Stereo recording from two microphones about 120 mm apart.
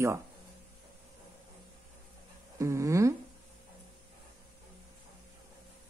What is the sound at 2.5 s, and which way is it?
Speech, 25° right (ahead or behind).